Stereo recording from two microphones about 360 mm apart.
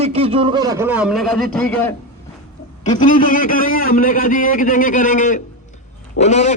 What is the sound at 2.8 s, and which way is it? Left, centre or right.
A man's voice, left.